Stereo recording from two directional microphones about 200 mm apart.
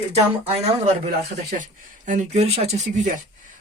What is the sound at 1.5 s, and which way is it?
Speech, 40° right (ahead or behind).